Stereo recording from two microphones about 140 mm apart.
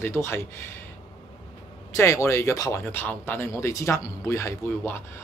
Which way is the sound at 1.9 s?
20° left (ahead or behind).